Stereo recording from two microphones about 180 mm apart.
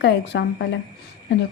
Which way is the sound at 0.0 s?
70° left (ahead or behind).